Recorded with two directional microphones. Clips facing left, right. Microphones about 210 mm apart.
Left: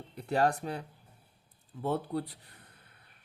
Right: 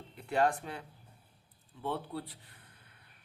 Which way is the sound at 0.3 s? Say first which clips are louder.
Left 2 dB; 40° left (ahead or behind).